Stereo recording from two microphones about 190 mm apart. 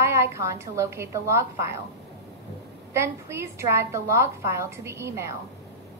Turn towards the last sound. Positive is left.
turn(degrees=-15)  # may be behind; listen again after turning